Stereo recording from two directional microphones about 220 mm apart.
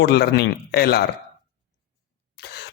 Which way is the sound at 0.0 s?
50° left (ahead or behind).